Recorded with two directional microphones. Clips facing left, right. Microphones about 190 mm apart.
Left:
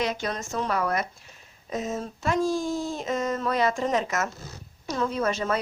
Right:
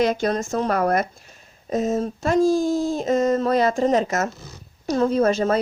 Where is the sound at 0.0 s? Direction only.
45° right (ahead or behind).